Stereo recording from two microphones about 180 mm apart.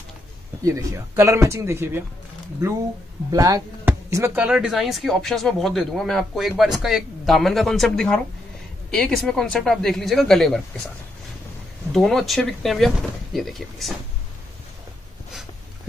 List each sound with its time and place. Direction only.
0.7 s speech: 15° right (ahead or behind)
3.3 s speech: 20° right (ahead or behind); by 10.6 s 5° left (ahead or behind)
11.9 s speech: centre (ahead or behind)